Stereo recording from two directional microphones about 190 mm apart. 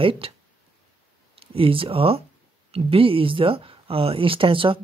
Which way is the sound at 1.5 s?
30° right (ahead or behind).